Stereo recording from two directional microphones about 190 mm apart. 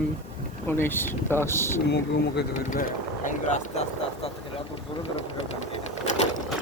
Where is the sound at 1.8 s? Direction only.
65° left (ahead or behind).